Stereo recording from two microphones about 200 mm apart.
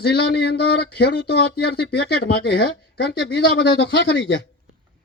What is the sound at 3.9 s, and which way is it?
Speech, 60° left (ahead or behind).